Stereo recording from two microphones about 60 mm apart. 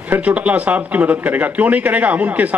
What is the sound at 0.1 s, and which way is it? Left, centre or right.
A man's voice, right.